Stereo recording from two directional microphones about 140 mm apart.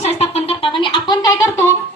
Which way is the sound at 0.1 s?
50° left (ahead or behind).